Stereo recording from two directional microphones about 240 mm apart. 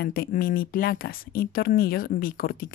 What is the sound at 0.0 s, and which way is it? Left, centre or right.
Speech, left.